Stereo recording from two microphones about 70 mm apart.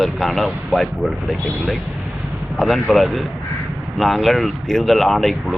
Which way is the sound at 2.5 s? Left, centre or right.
Centre.